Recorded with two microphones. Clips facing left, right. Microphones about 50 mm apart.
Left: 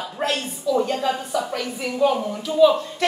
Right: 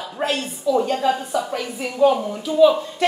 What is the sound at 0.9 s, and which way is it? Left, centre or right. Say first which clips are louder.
Speech: right 2 dB; right.